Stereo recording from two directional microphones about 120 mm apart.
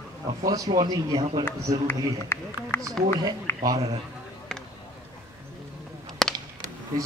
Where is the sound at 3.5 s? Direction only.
20° left (ahead or behind).